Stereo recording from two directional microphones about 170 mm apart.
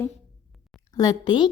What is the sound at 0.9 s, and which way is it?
Speech, 25° left (ahead or behind).